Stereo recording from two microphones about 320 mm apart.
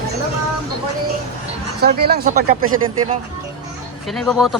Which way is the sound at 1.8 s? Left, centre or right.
Right.